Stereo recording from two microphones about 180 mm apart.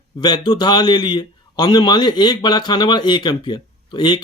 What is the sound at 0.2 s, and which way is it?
A man's voice, 25° left (ahead or behind).